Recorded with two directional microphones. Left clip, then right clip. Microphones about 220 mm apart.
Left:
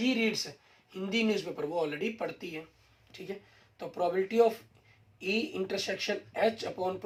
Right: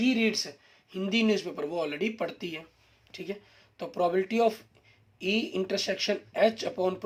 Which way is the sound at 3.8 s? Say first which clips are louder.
Right 3 dB; 50° right (ahead or behind).